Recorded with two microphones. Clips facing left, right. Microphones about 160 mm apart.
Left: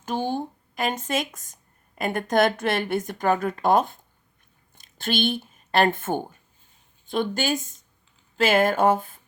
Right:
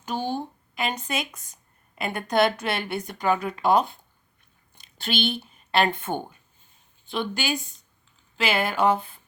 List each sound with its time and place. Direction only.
0.8 s a woman's voice: 45° left (ahead or behind)